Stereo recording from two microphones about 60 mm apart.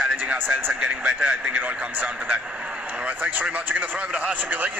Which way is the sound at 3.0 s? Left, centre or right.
Right.